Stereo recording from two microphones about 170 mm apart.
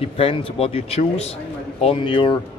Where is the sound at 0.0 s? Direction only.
35° left (ahead or behind).